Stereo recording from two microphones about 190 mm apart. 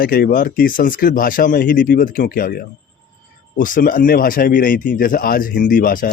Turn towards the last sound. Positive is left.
turn(degrees=45)  # may be behind; listen again after turning